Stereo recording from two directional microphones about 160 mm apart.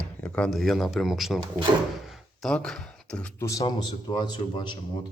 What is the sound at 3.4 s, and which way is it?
A man's voice, 20° left (ahead or behind).